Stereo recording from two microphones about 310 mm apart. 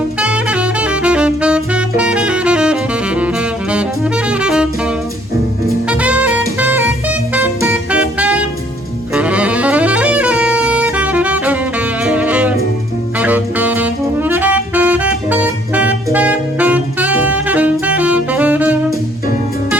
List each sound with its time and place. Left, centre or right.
0.2 s saxophone: centre
5.9 s saxophone: centre